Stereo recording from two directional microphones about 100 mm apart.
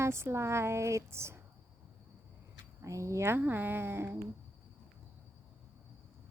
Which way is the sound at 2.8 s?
30° right (ahead or behind).